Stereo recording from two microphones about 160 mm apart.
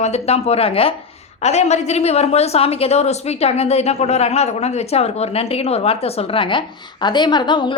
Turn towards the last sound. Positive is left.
turn(degrees=30)  # may be behind; listen again after turning